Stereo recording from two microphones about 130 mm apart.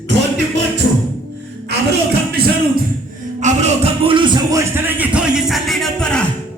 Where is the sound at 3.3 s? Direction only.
60° right (ahead or behind); by 4.4 s 40° right (ahead or behind).